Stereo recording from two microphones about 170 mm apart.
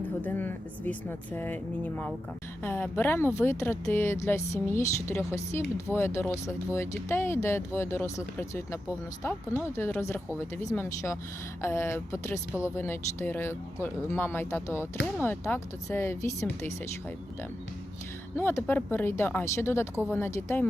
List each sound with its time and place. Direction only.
0.0 s speech: 10° left (ahead or behind)
18.3 s speech: 15° left (ahead or behind)